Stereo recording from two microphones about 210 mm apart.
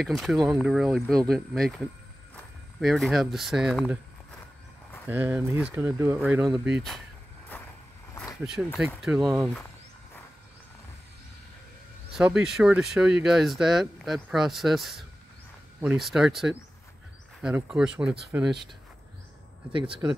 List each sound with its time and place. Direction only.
0.0 s speech: centre (ahead or behind)
5.0 s speech: 10° right (ahead or behind)
8.1 s a sound: 10° left (ahead or behind)
8.7 s speech: centre (ahead or behind)
12.1 s speech: 5° right (ahead or behind)
19.7 s speech: 25° right (ahead or behind)